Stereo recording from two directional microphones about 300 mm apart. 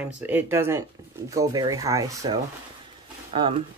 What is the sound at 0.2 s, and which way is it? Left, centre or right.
Speech, centre.